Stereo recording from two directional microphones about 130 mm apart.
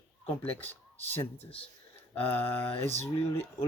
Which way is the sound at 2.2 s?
50° left (ahead or behind).